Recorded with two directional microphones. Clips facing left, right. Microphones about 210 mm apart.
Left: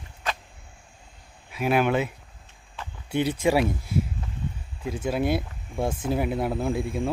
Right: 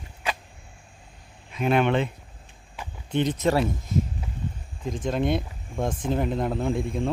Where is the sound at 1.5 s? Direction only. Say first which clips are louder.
Right 1 dB; 5° left (ahead or behind).